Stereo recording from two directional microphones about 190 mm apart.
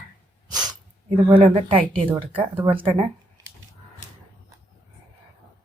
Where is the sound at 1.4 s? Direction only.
30° right (ahead or behind).